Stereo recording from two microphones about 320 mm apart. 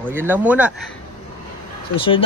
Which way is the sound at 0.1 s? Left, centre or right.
Centre.